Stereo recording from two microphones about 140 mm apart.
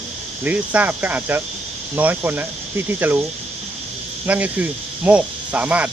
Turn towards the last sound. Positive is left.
turn(degrees=-10)  # may be behind; listen again after turning